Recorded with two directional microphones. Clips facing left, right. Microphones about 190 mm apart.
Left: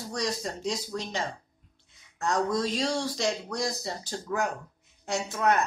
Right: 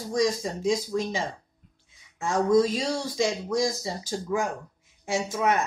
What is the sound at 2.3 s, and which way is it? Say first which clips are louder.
Speech: right 6 dB; 5° right (ahead or behind).